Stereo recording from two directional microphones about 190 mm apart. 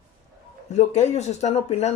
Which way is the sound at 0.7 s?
35° left (ahead or behind).